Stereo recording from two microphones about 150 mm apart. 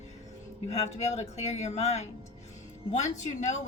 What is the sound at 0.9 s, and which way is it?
A woman's voice, 45° left (ahead or behind).